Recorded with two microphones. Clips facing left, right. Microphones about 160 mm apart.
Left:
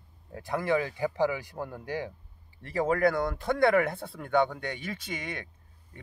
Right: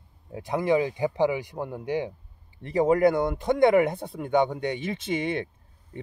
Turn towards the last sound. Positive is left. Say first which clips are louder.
# right 10 dB
turn(degrees=-25)  # may be behind; listen again after turning